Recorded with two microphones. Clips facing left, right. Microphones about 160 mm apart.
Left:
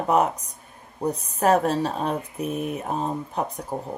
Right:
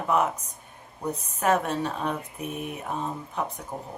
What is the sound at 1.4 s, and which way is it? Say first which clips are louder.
Speech: left 4 dB; 35° left (ahead or behind).